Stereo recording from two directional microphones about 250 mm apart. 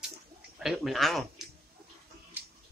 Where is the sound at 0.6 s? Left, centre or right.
Centre.